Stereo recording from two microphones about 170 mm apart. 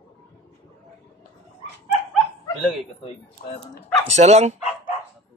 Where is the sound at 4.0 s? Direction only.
40° right (ahead or behind).